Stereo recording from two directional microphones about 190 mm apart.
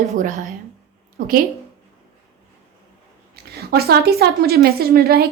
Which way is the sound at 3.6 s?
55° right (ahead or behind).